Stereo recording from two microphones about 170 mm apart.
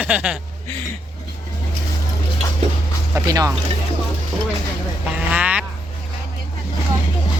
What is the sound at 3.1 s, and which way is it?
Speech, 20° right (ahead or behind).